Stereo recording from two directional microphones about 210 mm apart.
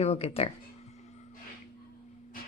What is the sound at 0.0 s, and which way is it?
Speech, 30° left (ahead or behind).